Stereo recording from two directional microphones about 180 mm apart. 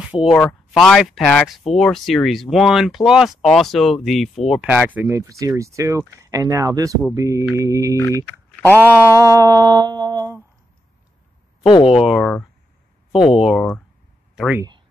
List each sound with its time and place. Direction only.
0.1 s speech: centre (ahead or behind)
8.7 s a sound: 10° right (ahead or behind)
11.6 s speech: 30° left (ahead or behind)
11.9 s speech: centre (ahead or behind)
13.4 s speech: 5° right (ahead or behind)
14.3 s a sound: 5° right (ahead or behind)